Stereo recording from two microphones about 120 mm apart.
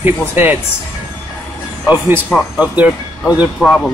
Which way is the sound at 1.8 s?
15° right (ahead or behind).